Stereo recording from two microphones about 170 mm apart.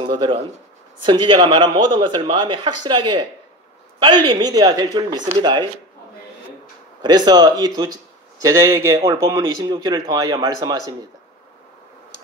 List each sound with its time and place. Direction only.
0.1 s speech: 30° right (ahead or behind)
7.0 s speech: 25° right (ahead or behind)